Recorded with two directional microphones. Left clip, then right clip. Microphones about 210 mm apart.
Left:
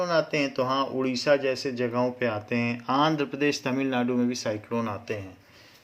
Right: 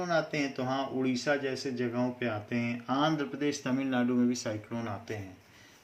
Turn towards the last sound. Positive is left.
turn(degrees=40)  # may be behind; listen again after turning